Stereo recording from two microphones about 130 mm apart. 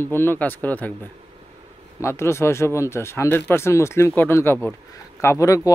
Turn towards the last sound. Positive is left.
turn(degrees=25)  # may be behind; listen again after turning